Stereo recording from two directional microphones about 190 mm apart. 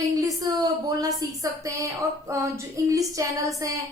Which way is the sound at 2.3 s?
15° right (ahead or behind).